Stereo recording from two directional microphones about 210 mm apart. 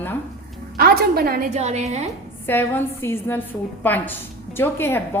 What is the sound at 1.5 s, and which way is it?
Speech, 30° right (ahead or behind).